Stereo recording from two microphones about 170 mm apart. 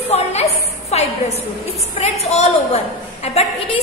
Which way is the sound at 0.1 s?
40° left (ahead or behind).